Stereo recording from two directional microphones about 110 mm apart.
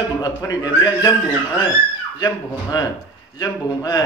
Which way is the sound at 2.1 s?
35° left (ahead or behind).